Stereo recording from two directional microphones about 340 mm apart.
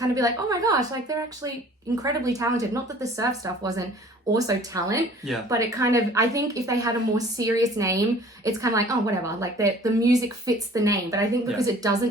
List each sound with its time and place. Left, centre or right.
0.0 s a woman's voice: centre